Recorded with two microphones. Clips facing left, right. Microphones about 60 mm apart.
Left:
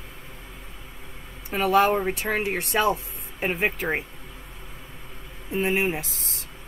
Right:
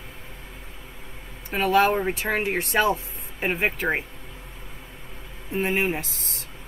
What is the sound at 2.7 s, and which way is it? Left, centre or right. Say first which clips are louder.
Speech: even; right.